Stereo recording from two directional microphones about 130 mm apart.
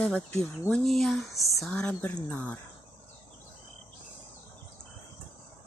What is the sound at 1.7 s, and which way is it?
Speech, 10° left (ahead or behind).